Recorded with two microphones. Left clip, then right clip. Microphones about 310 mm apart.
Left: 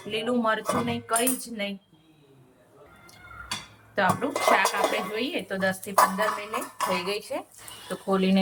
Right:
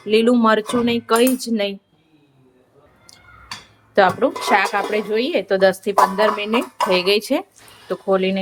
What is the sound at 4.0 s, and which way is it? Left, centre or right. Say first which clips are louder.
Speech: right 9 dB; centre.